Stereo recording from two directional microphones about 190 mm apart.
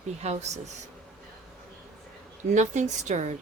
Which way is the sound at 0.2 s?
35° right (ahead or behind).